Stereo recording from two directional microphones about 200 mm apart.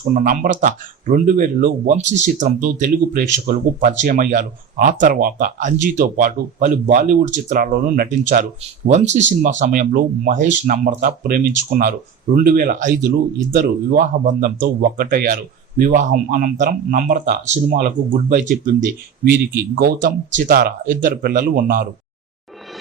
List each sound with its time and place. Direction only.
0.0 s speech: 40° right (ahead or behind)
19.7 s speech: 45° right (ahead or behind)